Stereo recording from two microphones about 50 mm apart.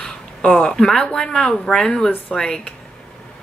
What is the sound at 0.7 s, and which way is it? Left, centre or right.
Speech, centre.